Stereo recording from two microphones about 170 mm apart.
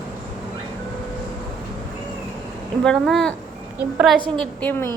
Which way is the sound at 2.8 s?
5° left (ahead or behind).